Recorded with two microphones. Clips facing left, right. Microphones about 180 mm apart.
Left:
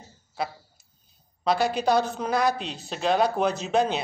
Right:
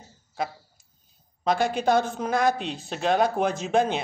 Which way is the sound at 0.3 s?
50° right (ahead or behind).